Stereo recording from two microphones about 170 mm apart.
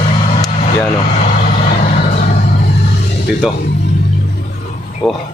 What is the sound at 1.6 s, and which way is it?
Vehicle, 50° left (ahead or behind).